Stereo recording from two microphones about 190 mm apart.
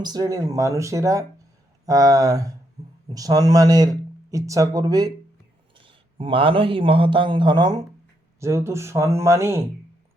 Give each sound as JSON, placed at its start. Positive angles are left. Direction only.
{"t": 0.0, "sound": "a man's voice", "side_deg": -20}